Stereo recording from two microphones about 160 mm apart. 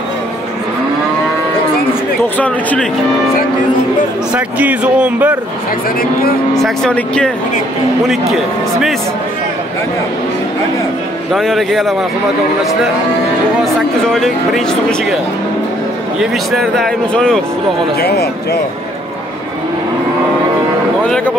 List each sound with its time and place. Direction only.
2.3 s speech: 10° left (ahead or behind)
4.3 s speech: 10° right (ahead or behind)
6.5 s speech: 5° left (ahead or behind)
11.3 s speech: centre (ahead or behind)
13.6 s speech: centre (ahead or behind)
16.2 s speech: centre (ahead or behind)
18.0 s a man's voice: 90° left